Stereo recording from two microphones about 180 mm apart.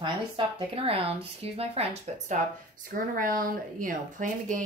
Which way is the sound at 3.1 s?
50° right (ahead or behind).